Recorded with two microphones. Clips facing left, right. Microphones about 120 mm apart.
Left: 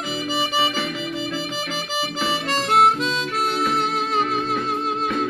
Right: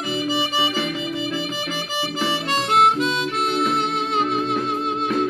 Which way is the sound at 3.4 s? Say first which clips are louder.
Right 1 dB; 25° right (ahead or behind).